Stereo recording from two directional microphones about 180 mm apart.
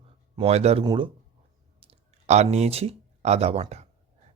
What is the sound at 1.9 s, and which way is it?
Speech, 40° right (ahead or behind).